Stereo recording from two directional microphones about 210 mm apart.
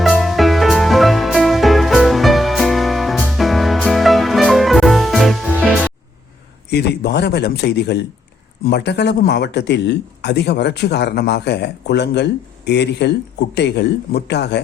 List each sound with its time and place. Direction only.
0.0 s music: centre (ahead or behind)
6.7 s a man's voice: 50° left (ahead or behind)